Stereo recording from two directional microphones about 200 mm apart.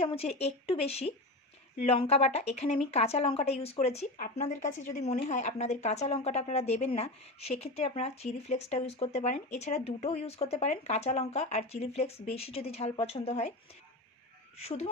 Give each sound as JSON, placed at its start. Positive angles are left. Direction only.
{"t": 0.0, "sound": "speech", "side_deg": 30}
{"t": 14.6, "sound": "speech", "side_deg": 30}